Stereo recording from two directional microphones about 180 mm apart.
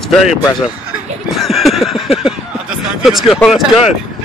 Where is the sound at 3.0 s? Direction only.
Centre (ahead or behind).